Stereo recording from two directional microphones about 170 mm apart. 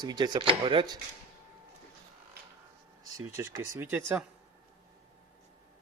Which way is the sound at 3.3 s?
15° right (ahead or behind).